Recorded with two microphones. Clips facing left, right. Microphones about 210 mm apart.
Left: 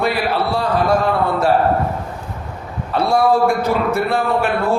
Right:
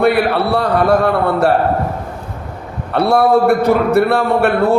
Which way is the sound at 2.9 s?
60° right (ahead or behind).